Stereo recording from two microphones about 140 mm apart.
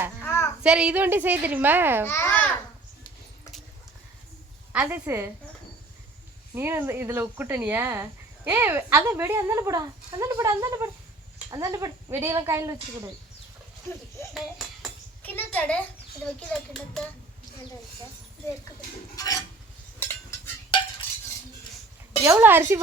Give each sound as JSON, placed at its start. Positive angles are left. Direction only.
{"t": 0.2, "sound": "a sound", "side_deg": 15}
{"t": 0.6, "sound": "speech", "side_deg": -5}
{"t": 2.0, "sound": "babbling", "side_deg": 15}
{"t": 4.7, "sound": "speech", "side_deg": -10}
{"t": 6.5, "sound": "speech", "side_deg": -15}
{"t": 14.3, "sound": "a sound", "side_deg": 0}
{"t": 15.2, "sound": "a sound", "side_deg": 10}
{"t": 16.2, "sound": "speech", "side_deg": 10}
{"t": 19.1, "sound": "cutlery", "side_deg": 25}
{"t": 20.0, "sound": "cutlery", "side_deg": 15}
{"t": 22.2, "sound": "speech", "side_deg": -15}